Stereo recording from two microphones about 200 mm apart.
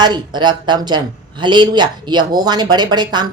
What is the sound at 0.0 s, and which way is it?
Speech, 20° right (ahead or behind).